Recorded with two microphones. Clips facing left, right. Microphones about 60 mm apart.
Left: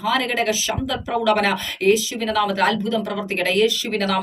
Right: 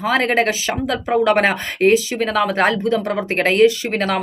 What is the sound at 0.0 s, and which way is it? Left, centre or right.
Speech, right.